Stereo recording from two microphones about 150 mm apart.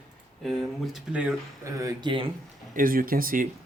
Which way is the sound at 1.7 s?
20° right (ahead or behind).